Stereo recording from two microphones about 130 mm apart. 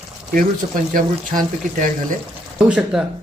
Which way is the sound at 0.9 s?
90° right.